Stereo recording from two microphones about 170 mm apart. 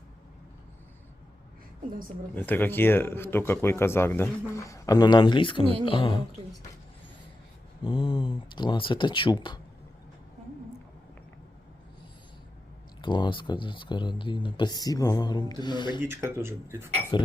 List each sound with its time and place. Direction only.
2.3 s speech: 10° left (ahead or behind); by 6.2 s 30° left (ahead or behind)
7.9 s speech: 30° left (ahead or behind)
13.0 s speech: 25° left (ahead or behind)
16.0 s speech: 15° right (ahead or behind)
17.1 s speech: 25° left (ahead or behind)